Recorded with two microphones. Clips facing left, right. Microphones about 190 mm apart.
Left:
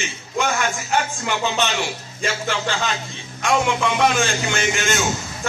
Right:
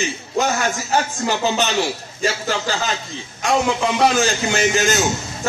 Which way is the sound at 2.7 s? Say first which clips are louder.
Right 1 dB; 35° right (ahead or behind).